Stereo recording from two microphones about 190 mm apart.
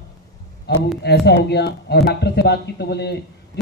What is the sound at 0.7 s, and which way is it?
A man's voice, 60° left (ahead or behind).